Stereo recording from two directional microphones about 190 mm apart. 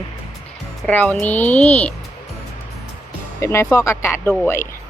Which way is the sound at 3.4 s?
15° left (ahead or behind).